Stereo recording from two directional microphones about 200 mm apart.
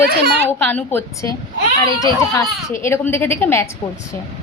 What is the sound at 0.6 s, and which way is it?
A woman's voice, 10° left (ahead or behind).